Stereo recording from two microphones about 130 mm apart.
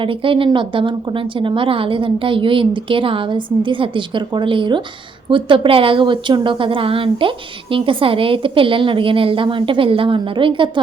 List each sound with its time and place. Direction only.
0.0 s a woman's voice: 40° right (ahead or behind)